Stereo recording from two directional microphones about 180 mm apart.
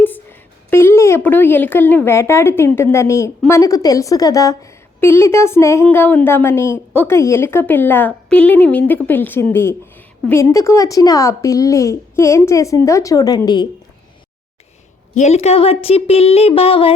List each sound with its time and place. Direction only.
0.0 s a woman's voice: 10° left (ahead or behind)
15.1 s speech: 40° left (ahead or behind)